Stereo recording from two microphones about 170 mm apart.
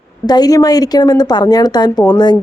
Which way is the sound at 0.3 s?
25° left (ahead or behind).